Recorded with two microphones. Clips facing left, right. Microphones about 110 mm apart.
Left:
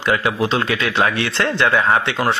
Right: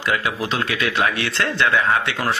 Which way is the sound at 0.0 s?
30° left (ahead or behind).